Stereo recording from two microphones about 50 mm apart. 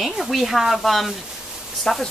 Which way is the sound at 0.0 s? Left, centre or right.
Centre.